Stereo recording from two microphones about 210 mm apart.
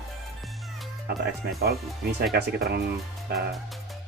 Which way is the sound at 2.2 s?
50° right (ahead or behind).